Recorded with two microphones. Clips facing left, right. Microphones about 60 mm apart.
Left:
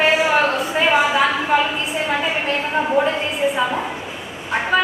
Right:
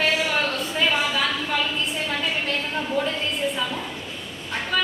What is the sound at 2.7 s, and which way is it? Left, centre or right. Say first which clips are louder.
Speech: left 10 dB; left.